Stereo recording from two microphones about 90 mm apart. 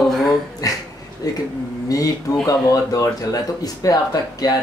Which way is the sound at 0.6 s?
40° left (ahead or behind).